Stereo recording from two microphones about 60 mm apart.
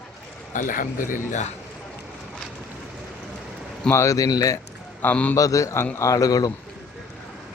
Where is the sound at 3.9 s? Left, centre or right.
Left.